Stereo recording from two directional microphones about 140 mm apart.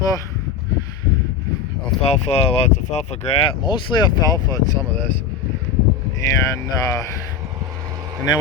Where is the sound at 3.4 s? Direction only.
35° left (ahead or behind).